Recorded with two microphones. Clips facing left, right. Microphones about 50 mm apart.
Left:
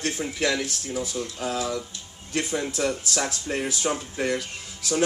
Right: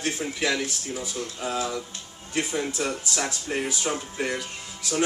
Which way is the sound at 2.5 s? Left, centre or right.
Centre.